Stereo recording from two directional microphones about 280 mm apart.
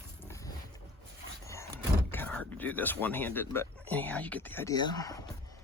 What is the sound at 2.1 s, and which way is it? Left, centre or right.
Speech, centre.